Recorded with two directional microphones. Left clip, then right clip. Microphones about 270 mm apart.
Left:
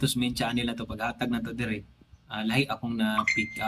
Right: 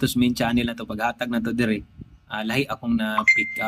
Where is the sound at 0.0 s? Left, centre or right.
Centre.